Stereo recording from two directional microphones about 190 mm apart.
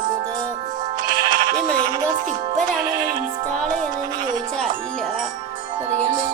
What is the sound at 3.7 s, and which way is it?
Music, 40° right (ahead or behind).